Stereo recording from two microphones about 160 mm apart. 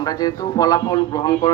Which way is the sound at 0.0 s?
25° left (ahead or behind).